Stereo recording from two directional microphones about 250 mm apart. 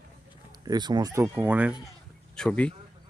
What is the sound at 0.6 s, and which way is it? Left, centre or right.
Speech, centre.